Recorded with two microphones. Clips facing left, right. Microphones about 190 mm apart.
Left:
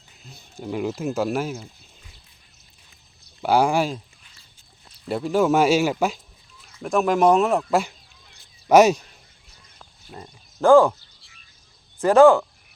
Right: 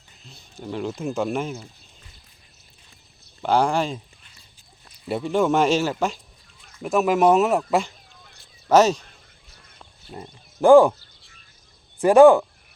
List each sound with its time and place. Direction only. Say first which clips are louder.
0.3 s speech: left 2 dB; 10° left (ahead or behind)
3.4 s speech: left 1 dB; 10° left (ahead or behind)
5.0 s speech: left 1 dB; centre (ahead or behind)
6.8 s speech: even; 5° right (ahead or behind)
8.7 s speech: left 2 dB; 10° left (ahead or behind)
9.7 s a sound: right 2 dB; 5° right (ahead or behind)
10.6 s speech: right 2 dB; 15° right (ahead or behind)
12.0 s speech: right 2 dB; 15° right (ahead or behind)